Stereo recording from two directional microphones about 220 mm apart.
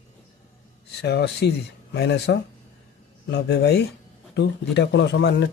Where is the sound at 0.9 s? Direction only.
50° left (ahead or behind).